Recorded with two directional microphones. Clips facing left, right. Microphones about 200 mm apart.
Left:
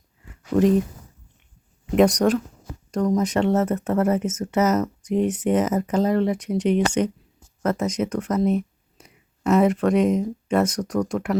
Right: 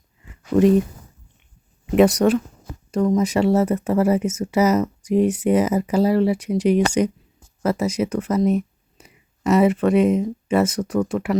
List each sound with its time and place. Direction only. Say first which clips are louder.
0.5 s speech: right 3 dB; 5° right (ahead or behind)
2.0 s speech: right 2 dB; 5° right (ahead or behind)